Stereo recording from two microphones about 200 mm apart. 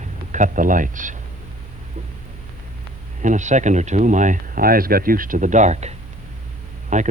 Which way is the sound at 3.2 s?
35° right (ahead or behind).